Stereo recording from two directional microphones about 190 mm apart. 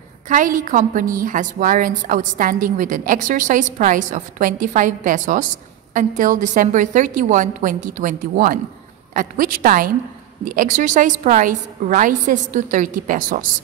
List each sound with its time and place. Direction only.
0.3 s a woman's voice: 45° right (ahead or behind)